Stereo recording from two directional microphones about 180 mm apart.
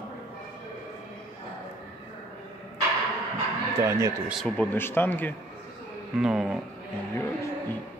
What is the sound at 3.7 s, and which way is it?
Speech, 15° right (ahead or behind).